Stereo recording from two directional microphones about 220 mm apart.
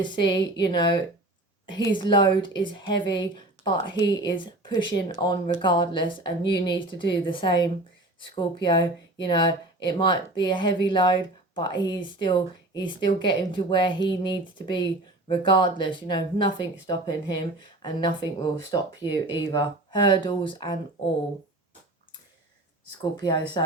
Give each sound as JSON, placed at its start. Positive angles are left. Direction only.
{"t": 0.0, "sound": "speech", "side_deg": 20}
{"t": 23.1, "sound": "speech", "side_deg": 20}